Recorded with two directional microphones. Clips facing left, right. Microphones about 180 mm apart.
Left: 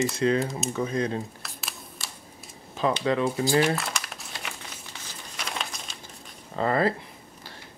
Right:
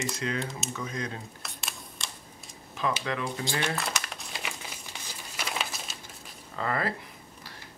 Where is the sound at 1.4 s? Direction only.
Centre (ahead or behind).